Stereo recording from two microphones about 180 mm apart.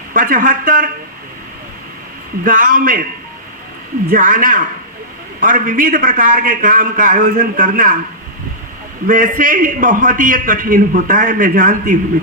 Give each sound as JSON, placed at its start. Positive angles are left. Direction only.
{"t": 0.1, "sound": "a man's voice", "side_deg": -50}
{"t": 2.4, "sound": "a man's voice", "side_deg": -50}
{"t": 4.1, "sound": "a man's voice", "side_deg": -50}
{"t": 9.0, "sound": "a man's voice", "side_deg": -50}